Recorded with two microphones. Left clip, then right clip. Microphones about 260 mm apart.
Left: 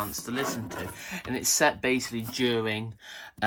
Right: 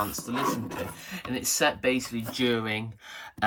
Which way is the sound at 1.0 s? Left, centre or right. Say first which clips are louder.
Left 4 dB; centre.